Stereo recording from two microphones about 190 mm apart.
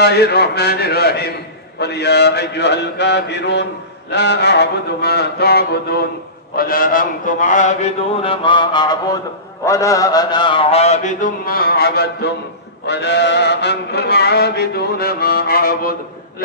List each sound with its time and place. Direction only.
0.0 s music: 55° left (ahead or behind)
6.5 s a man's voice: 50° left (ahead or behind)
12.8 s music: 65° left (ahead or behind)